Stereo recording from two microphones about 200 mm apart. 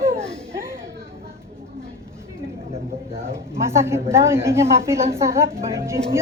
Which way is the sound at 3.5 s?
15° right (ahead or behind).